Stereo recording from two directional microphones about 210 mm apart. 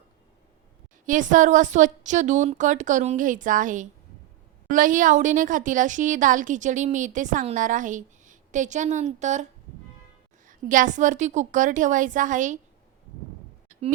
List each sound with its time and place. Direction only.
1.0 s a woman's voice: 35° right (ahead or behind)